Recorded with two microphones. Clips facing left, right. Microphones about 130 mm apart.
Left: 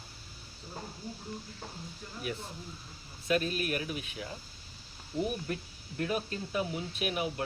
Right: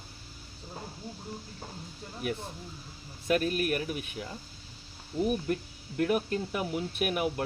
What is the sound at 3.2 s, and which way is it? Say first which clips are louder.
Speech: right 3 dB; 50° right (ahead or behind).